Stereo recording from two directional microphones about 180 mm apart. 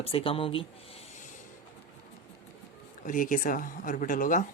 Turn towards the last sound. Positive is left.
turn(degrees=45)  # may be behind; listen again after turning